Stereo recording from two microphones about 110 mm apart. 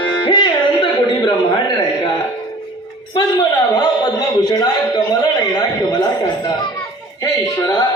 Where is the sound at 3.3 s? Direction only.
40° left (ahead or behind).